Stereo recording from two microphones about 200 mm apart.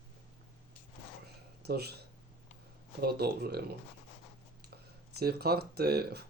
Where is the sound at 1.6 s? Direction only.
55° right (ahead or behind).